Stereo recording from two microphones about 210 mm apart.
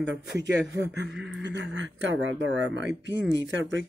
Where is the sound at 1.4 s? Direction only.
60° right (ahead or behind).